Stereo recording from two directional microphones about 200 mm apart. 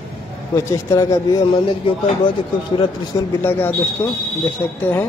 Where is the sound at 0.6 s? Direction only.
15° left (ahead or behind).